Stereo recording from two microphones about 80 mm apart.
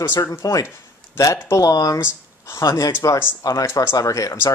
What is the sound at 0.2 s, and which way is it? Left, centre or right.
A man's voice, left.